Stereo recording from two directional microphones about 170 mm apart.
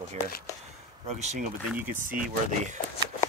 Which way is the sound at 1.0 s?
45° right (ahead or behind).